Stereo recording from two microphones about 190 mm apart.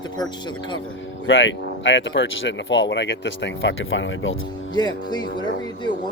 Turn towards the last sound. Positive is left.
turn(degrees=25)  # may be behind; listen again after turning